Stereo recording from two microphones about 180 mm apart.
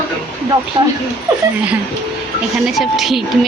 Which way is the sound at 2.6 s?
Centre (ahead or behind).